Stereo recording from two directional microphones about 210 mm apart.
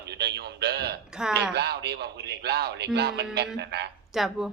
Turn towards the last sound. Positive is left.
turn(degrees=0)  # may be behind; listen again after turning